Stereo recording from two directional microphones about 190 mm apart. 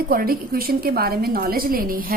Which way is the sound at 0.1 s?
50° right (ahead or behind).